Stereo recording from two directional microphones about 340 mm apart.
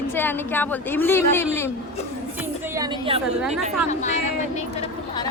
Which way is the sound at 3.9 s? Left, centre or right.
Left.